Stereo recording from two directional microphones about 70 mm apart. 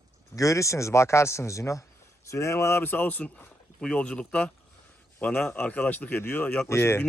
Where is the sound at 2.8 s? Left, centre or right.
Left.